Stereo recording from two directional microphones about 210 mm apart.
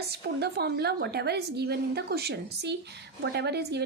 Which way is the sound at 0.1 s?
50° right (ahead or behind).